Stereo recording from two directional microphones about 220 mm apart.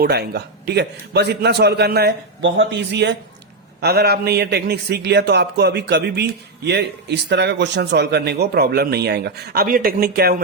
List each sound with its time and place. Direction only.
0.0 s a man's voice: 45° right (ahead or behind)